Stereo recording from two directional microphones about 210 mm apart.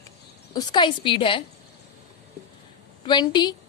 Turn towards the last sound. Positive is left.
turn(degrees=20)  # may be behind; listen again after turning